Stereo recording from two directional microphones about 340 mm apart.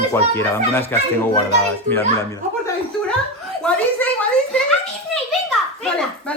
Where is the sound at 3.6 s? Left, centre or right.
Centre.